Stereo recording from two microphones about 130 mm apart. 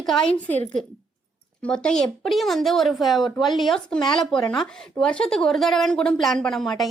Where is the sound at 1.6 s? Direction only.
5° left (ahead or behind).